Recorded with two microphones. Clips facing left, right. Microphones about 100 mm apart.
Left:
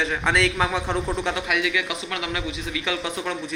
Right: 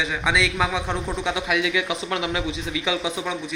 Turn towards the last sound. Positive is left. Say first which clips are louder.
# right 1 dB
turn(degrees=-10)  # may be behind; listen again after turning